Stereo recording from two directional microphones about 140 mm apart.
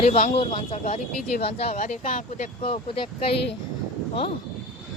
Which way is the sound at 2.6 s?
40° left (ahead or behind).